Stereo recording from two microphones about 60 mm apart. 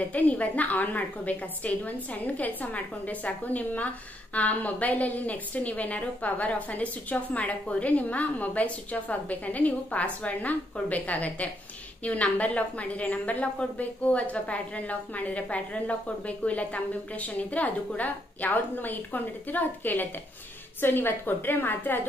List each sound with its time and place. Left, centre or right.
0.1 s a woman's voice: left